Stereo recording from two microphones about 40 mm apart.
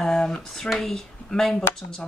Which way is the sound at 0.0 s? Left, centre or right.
Centre.